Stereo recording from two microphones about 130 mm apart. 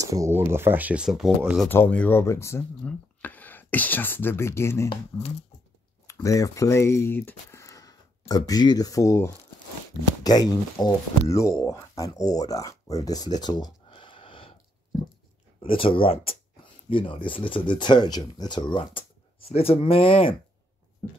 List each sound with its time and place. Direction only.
0.0 s speech: 25° right (ahead or behind); by 1.7 s 5° right (ahead or behind)
1.7 s speech: 15° left (ahead or behind)
6.2 s speech: 25° left (ahead or behind); by 14.5 s 40° left (ahead or behind)
15.6 s speech: 45° left (ahead or behind)
19.5 s speech: 50° left (ahead or behind)